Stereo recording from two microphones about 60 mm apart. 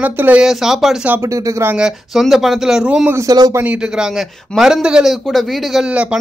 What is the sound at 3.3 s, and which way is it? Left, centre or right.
Speech, right.